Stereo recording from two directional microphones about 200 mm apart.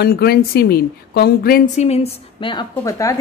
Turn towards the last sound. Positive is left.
turn(degrees=15)  # may be behind; listen again after turning